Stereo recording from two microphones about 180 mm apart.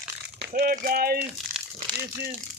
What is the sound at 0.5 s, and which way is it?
Speech, 55° right (ahead or behind).